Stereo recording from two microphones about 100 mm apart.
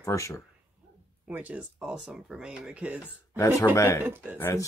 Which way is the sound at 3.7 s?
30° left (ahead or behind).